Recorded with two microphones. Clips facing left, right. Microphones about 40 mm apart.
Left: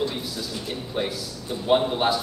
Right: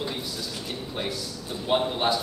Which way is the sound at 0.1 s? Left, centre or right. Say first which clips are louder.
Left 2 dB; centre.